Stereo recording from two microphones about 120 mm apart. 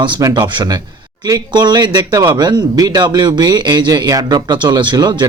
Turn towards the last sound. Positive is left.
turn(degrees=-35)  # may be behind; listen again after turning